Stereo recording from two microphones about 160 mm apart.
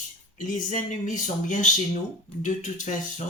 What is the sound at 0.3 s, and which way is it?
Speech, 50° left (ahead or behind).